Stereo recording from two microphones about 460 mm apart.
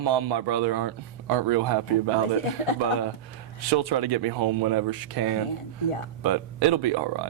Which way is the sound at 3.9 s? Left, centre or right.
Right.